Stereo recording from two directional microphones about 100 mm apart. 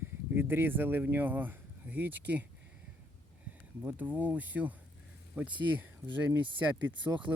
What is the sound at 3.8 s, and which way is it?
Speech, 15° right (ahead or behind).